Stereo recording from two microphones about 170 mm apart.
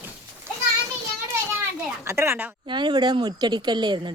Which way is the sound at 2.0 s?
15° right (ahead or behind).